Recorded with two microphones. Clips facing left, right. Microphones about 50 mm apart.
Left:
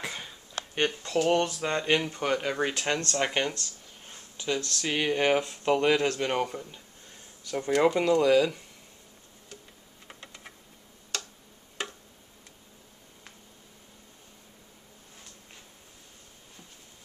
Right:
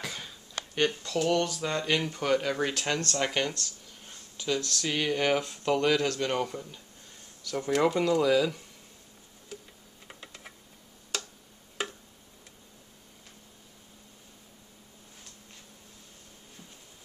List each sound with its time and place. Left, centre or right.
0.0 s speech: centre
7.8 s speech: centre
9.5 s tick-tock: centre
10.0 s computer keyboard: centre
11.1 s tick: centre